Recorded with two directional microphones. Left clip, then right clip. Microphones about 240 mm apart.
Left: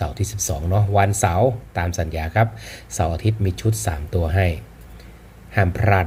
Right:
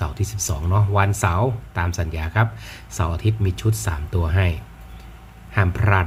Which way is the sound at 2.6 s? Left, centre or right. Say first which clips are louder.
Left 1 dB; right.